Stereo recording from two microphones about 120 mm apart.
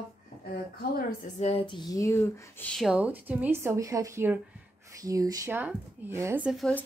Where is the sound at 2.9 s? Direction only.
10° right (ahead or behind); by 5.5 s 30° right (ahead or behind).